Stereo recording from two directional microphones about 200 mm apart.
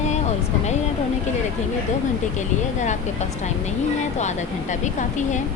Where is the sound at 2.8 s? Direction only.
35° left (ahead or behind).